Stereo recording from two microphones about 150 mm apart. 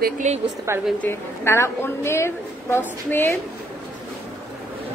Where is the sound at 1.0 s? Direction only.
15° left (ahead or behind).